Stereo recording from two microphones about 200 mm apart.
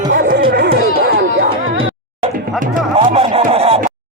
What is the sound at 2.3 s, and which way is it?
Music, 40° right (ahead or behind).